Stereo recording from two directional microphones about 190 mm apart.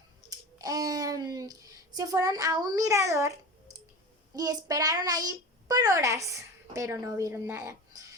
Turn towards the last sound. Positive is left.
turn(degrees=-15)  # may be behind; listen again after turning